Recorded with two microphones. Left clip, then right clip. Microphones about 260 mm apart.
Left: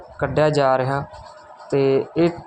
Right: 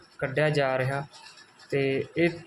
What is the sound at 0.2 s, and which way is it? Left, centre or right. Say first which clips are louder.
Speech: left 7 dB; centre.